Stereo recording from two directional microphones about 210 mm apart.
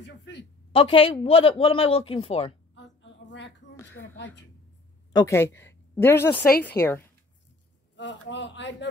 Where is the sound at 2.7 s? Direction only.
60° left (ahead or behind).